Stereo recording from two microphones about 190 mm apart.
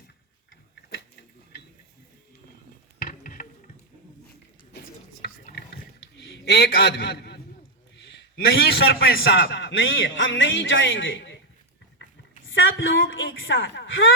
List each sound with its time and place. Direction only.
3.0 s dishes: 45° left (ahead or behind)
4.7 s chopping: 60° left (ahead or behind)
5.2 s a sound: 55° left (ahead or behind)
7.9 s a man's voice: 65° left (ahead or behind)
12.0 s a sound: 65° left (ahead or behind)
12.5 s a woman's voice: 90° left